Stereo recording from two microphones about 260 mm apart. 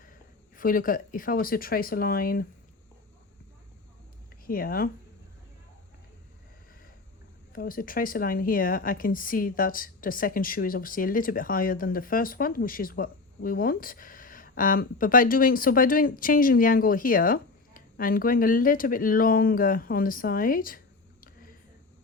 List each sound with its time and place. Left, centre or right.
0.5 s speech: left
4.4 s speech: left
7.5 s speech: left